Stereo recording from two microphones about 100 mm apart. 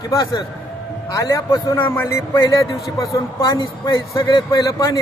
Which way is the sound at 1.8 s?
25° left (ahead or behind).